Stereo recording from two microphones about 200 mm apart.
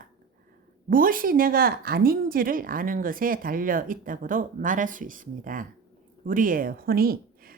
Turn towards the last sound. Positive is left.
turn(degrees=-50)  # may be behind; listen again after turning